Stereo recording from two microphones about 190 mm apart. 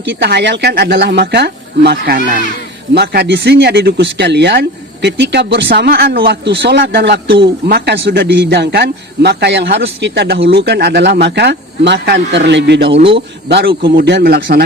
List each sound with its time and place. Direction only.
0.0 s a man's voice: 70° right (ahead or behind)
13.0 s a man's voice: 30° right (ahead or behind)
13.5 s a man's voice: 60° right (ahead or behind)